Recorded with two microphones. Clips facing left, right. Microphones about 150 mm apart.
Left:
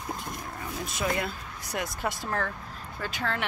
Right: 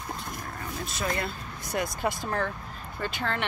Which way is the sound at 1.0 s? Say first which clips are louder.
Left 1 dB; 10° left (ahead or behind).